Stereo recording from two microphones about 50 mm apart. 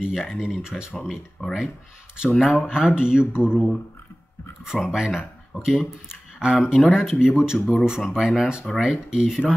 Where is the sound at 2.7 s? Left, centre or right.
Centre.